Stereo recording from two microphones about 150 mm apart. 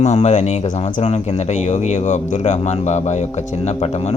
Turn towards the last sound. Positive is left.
turn(degrees=45)  # may be behind; listen again after turning